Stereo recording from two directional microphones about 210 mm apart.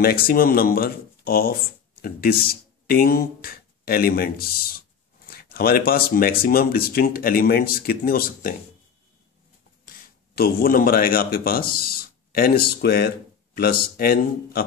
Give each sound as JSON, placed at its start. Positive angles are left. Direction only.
{"t": 0.0, "sound": "speech", "side_deg": 45}
{"t": 9.8, "sound": "speech", "side_deg": 45}